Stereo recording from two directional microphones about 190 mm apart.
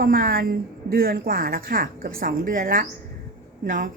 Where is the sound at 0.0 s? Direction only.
50° right (ahead or behind).